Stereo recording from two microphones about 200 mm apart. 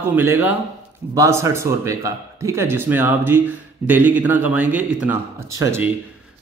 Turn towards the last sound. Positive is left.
turn(degrees=-10)  # may be behind; listen again after turning